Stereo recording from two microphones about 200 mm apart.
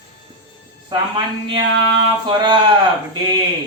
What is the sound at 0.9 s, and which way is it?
Speech, 20° right (ahead or behind).